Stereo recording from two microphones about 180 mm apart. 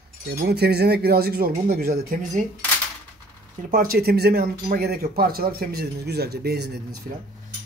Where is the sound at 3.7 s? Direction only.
55° right (ahead or behind).